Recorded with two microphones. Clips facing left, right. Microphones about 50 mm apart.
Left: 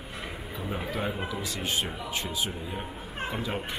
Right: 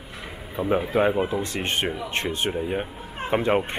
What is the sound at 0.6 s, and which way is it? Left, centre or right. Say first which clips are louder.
Speech: right 11 dB; right.